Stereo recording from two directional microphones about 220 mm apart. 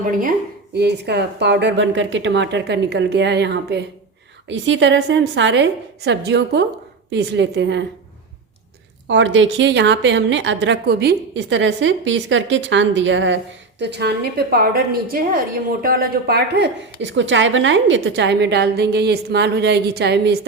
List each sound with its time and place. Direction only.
0.0 s a woman's voice: 40° right (ahead or behind)
9.0 s a woman's voice: 55° right (ahead or behind)